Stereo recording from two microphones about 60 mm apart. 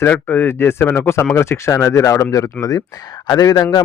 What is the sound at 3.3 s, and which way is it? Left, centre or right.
Speech, left.